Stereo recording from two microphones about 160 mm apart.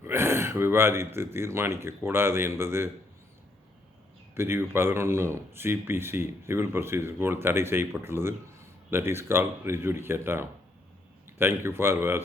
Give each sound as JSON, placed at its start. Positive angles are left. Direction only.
{"t": 0.0, "sound": "speech", "side_deg": -15}
{"t": 4.4, "sound": "speech", "side_deg": -15}